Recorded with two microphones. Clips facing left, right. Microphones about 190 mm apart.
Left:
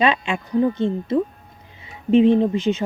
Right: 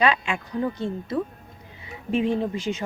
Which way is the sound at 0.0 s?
20° left (ahead or behind).